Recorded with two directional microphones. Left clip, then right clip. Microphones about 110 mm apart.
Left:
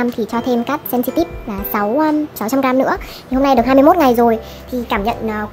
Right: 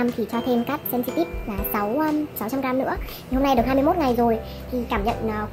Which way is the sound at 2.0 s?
30° left (ahead or behind).